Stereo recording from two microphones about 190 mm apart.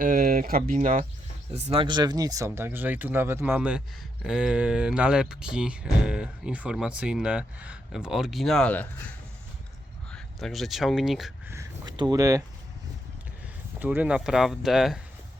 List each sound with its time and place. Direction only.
0.0 s speech: 45° right (ahead or behind)
1.5 s speech: 30° right (ahead or behind); by 11.3 s centre (ahead or behind)
11.4 s speech: 15° right (ahead or behind)
13.7 s speech: 10° right (ahead or behind)